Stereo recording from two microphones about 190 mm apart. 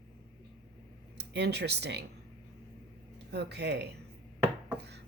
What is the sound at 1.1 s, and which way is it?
Speech, 60° right (ahead or behind).